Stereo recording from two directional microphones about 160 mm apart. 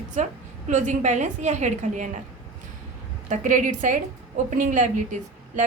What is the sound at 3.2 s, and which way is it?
A woman's voice, 50° right (ahead or behind).